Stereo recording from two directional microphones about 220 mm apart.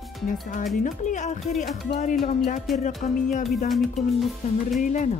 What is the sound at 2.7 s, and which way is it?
Speech, centre (ahead or behind).